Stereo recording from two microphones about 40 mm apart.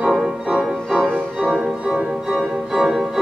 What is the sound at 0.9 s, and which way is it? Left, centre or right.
Music, centre.